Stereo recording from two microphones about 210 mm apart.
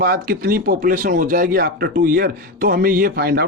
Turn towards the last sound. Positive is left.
turn(degrees=-50)  # may be behind; listen again after turning